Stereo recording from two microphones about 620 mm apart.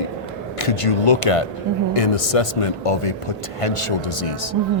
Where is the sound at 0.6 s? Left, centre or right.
Left.